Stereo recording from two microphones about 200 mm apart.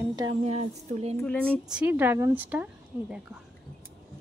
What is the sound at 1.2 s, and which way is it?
Speech, 5° left (ahead or behind).